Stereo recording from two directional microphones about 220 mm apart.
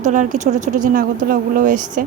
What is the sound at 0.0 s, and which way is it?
Speech, 35° right (ahead or behind).